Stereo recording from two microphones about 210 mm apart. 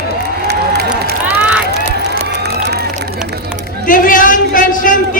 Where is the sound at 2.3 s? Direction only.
50° right (ahead or behind).